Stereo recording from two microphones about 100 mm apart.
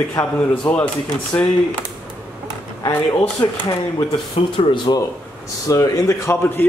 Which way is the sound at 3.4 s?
40° left (ahead or behind).